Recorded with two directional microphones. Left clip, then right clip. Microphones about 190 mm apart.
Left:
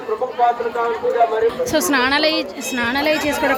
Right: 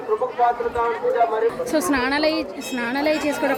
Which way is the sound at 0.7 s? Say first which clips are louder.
Left 2 dB; 35° left (ahead or behind).